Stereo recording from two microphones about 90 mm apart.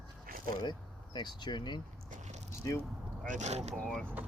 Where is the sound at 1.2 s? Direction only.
55° left (ahead or behind).